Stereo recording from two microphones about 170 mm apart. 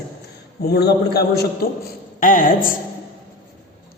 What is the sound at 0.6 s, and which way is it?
Speech, 70° left (ahead or behind).